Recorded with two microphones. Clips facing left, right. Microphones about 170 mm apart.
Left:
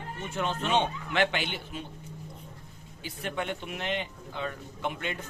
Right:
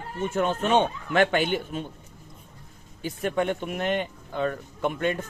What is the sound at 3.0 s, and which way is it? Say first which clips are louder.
Speech: right 8 dB; 45° right (ahead or behind).